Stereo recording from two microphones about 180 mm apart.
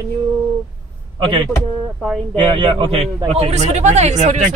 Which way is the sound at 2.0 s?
Centre (ahead or behind).